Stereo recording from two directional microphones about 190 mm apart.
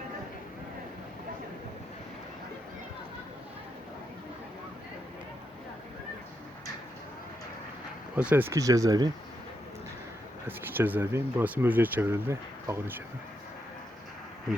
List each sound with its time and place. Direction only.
8.1 s speech: 10° right (ahead or behind)
10.4 s speech: 10° right (ahead or behind)